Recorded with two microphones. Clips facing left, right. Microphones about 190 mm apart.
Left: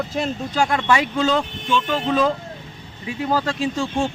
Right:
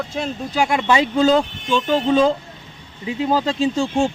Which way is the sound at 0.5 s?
15° right (ahead or behind).